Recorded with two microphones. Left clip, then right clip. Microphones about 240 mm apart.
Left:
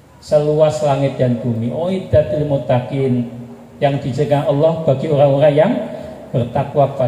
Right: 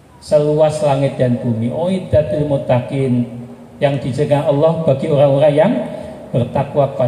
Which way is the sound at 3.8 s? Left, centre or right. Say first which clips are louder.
Right 1 dB; right.